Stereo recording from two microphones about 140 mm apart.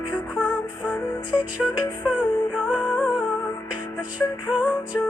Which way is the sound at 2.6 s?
10° right (ahead or behind).